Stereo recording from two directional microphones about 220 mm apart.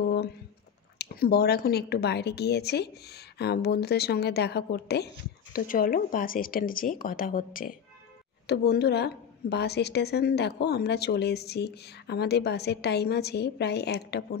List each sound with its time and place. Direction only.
0.9 s a woman's voice: 45° left (ahead or behind)